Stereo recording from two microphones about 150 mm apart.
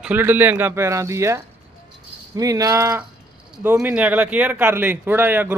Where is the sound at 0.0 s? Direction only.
10° right (ahead or behind).